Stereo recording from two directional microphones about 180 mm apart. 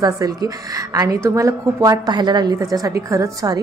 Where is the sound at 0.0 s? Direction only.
20° right (ahead or behind).